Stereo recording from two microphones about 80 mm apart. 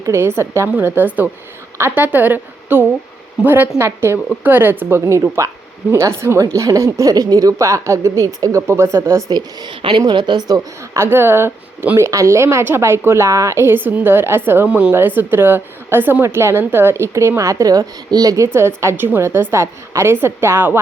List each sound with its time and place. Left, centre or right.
0.0 s a woman's voice: right
0.7 s a woman's voice: right
6.4 s a woman's voice: right
9.3 s a woman's voice: right
10.0 s a woman's voice: right
10.9 s a woman's voice: right
14.7 s a woman's voice: centre
14.9 s a woman's voice: right
18.5 s a woman's voice: right